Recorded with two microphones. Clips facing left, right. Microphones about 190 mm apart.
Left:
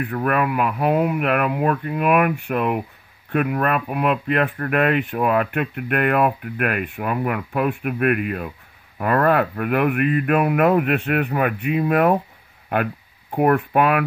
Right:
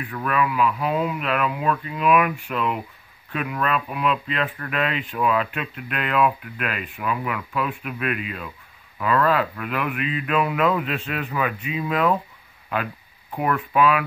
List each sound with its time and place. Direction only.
0.0 s speech: 55° left (ahead or behind)